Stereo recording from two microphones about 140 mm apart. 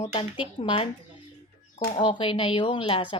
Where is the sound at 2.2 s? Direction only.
40° left (ahead or behind).